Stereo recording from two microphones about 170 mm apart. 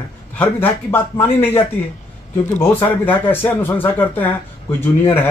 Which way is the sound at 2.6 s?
10° left (ahead or behind).